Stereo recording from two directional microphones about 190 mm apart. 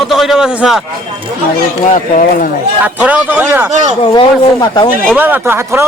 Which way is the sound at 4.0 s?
25° left (ahead or behind).